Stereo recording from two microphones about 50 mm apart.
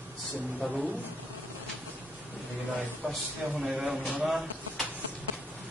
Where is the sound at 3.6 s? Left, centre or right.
Centre.